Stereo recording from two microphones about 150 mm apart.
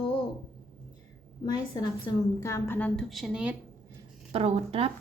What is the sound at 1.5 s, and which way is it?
A woman's voice, 25° left (ahead or behind).